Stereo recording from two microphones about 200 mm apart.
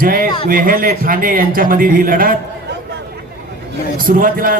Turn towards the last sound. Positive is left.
turn(degrees=-45)  # may be behind; listen again after turning